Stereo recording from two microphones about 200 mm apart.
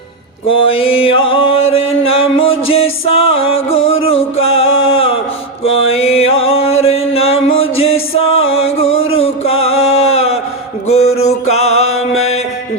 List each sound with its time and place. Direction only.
0.5 s music: 30° left (ahead or behind)
4.8 s mantra: 30° left (ahead or behind)
5.6 s music: 30° left (ahead or behind)